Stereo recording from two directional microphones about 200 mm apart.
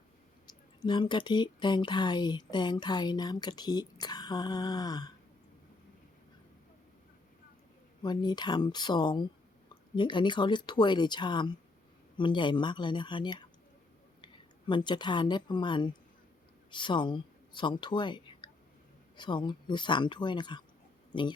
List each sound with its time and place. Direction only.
0.4 s speech: 20° left (ahead or behind)
8.0 s speech: 20° left (ahead or behind)
14.7 s speech: 25° left (ahead or behind)